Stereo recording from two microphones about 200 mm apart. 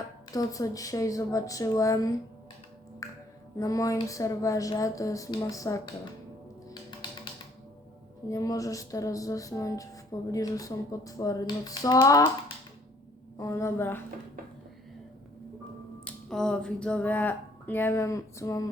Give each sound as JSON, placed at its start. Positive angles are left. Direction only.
{"t": 0.3, "sound": "music", "side_deg": 15}
{"t": 8.3, "sound": "music", "side_deg": 15}
{"t": 13.4, "sound": "music", "side_deg": 15}
{"t": 16.0, "sound": "speech", "side_deg": 5}